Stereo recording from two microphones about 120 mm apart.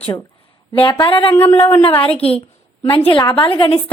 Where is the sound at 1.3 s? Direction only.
15° left (ahead or behind).